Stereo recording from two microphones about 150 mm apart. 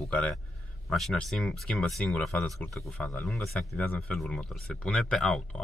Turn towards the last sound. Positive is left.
turn(degrees=5)  # may be behind; listen again after turning